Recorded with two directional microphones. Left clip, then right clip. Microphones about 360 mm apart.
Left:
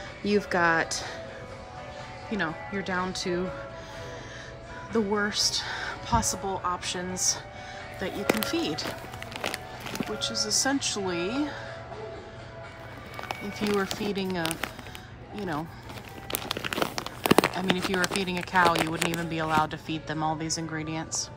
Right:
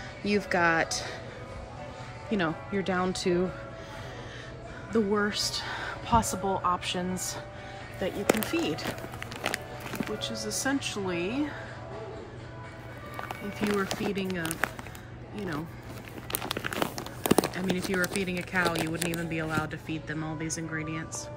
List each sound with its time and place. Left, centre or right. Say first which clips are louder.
0.5 s speech: even; centre
2.3 s speech: right 1 dB; centre
4.9 s speech: left 1 dB; centre
13.2 s speech: left 1 dB; centre